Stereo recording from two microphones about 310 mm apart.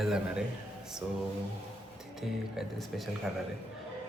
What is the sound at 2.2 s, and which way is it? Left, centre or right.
Speech, centre.